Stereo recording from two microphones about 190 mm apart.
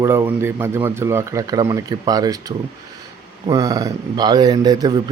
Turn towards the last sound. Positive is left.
turn(degrees=-20)  # may be behind; listen again after turning